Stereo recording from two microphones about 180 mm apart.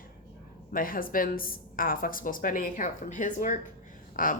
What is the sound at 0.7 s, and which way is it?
A woman's voice, 50° left (ahead or behind).